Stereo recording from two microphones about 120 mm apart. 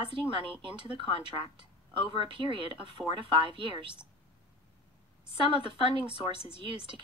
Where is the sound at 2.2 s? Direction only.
45° right (ahead or behind).